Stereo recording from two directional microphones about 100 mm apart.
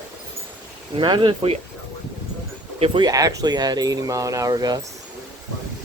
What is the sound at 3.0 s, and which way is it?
Speech, 35° right (ahead or behind).